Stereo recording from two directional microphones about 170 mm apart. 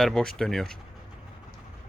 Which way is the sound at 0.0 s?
5° left (ahead or behind).